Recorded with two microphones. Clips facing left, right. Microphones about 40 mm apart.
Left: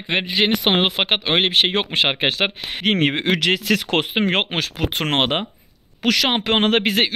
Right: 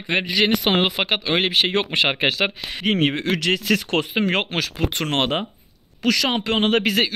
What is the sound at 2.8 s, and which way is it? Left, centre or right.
Speech, left.